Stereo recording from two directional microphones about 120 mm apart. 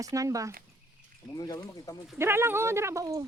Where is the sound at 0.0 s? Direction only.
30° right (ahead or behind).